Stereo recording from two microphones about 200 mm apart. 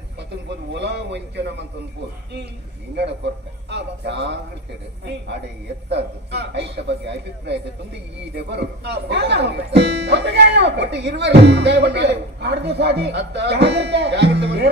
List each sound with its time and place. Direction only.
0.7 s a man's voice: 60° right (ahead or behind)
3.7 s a man's voice: 60° right (ahead or behind)
5.9 s a man's voice: 55° right (ahead or behind)